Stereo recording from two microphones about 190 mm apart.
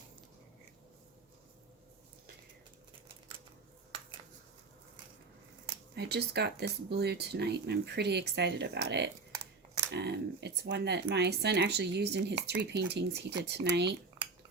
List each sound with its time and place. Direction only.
6.0 s speech: 60° right (ahead or behind)